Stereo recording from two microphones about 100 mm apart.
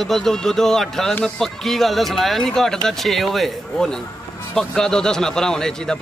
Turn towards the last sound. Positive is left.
turn(degrees=5)  # may be behind; listen again after turning